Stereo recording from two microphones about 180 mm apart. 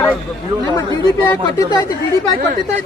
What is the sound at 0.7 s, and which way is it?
A man's voice, 20° left (ahead or behind).